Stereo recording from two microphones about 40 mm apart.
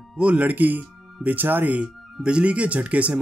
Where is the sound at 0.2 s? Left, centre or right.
Right.